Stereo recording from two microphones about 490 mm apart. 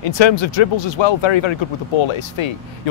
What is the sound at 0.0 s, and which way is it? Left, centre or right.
Speech, left.